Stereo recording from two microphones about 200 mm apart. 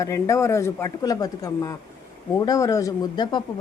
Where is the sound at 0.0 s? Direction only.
15° left (ahead or behind).